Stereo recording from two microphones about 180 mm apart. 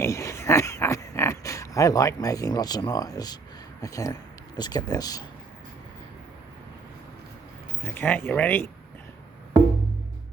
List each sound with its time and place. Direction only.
0.0 s a sound: 15° left (ahead or behind)
3.8 s speech: 20° left (ahead or behind)
7.9 s speech: 10° left (ahead or behind)